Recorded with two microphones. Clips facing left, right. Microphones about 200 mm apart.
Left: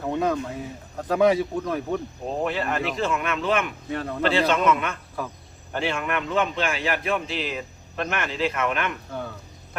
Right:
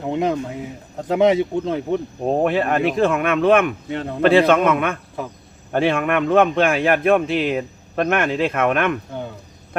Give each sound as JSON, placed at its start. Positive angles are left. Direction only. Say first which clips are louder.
{"t": 0.0, "sound": "speech", "louder": "right 3 dB", "side_deg": -20}
{"t": 2.2, "sound": "a man's voice", "louder": "right 9 dB", "side_deg": -55}
{"t": 3.8, "sound": "speech", "louder": "right 3 dB", "side_deg": -25}
{"t": 4.2, "sound": "a man's voice", "louder": "right 8 dB", "side_deg": -55}
{"t": 5.2, "sound": "speech", "louder": "left 1 dB", "side_deg": -20}
{"t": 5.7, "sound": "a man's voice", "louder": "right 8 dB", "side_deg": -55}